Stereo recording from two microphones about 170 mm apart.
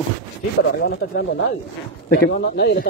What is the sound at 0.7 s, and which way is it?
Speech, 80° left.